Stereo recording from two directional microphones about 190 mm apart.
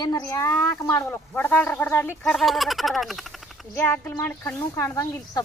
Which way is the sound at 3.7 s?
15° left (ahead or behind).